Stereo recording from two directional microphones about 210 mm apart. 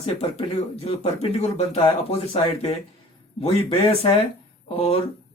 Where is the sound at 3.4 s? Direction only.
25° left (ahead or behind).